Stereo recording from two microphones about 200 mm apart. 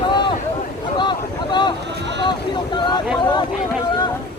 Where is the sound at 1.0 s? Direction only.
20° left (ahead or behind).